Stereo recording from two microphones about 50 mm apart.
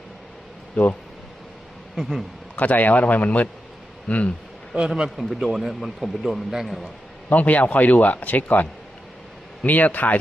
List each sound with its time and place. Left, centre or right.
0.8 s speech: left
2.0 s speech: centre
2.6 s speech: left
4.7 s speech: right
5.1 s speech: centre
7.3 s speech: left
9.6 s speech: left